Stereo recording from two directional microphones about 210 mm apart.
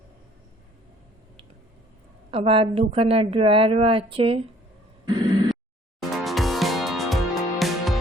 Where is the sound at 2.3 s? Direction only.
25° right (ahead or behind).